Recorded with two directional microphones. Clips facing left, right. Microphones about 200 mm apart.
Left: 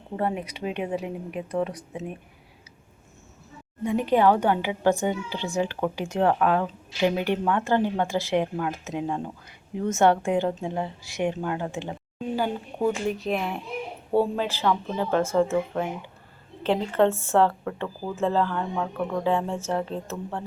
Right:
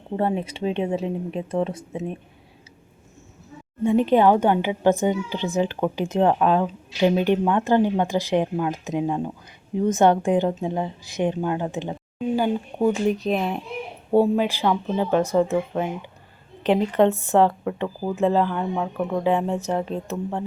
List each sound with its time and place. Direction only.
0.2 s a woman's voice: 25° right (ahead or behind)
3.8 s a woman's voice: 25° right (ahead or behind)